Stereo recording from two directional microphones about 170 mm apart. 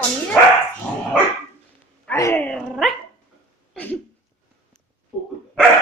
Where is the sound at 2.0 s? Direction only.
15° left (ahead or behind).